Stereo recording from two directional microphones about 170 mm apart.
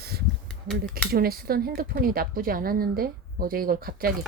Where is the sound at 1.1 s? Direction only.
60° right (ahead or behind).